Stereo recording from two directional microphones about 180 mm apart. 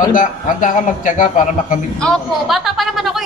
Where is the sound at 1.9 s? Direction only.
Centre (ahead or behind).